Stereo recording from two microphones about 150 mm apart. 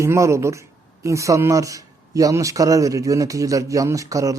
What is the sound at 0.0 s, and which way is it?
A man's voice, 20° right (ahead or behind).